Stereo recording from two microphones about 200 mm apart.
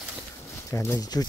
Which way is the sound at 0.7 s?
15° left (ahead or behind).